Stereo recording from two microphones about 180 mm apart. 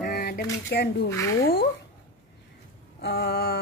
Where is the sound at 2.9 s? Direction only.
65° left (ahead or behind).